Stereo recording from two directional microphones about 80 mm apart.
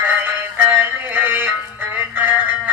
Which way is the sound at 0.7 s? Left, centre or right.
Right.